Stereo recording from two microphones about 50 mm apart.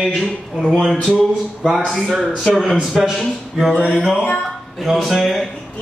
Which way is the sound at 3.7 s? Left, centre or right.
Right.